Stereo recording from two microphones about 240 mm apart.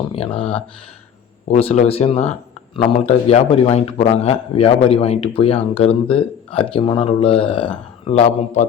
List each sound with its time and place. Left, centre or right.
0.1 s a man's voice: left